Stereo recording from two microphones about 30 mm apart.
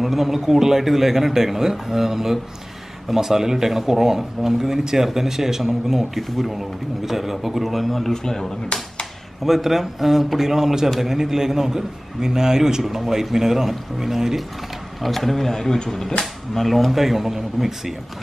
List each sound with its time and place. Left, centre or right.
0.0 s a man's voice: centre
8.1 s speech: centre
9.4 s a man's voice: centre
15.0 s a man's voice: centre